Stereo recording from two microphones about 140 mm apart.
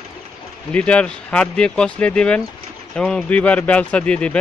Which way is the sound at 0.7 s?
10° left (ahead or behind).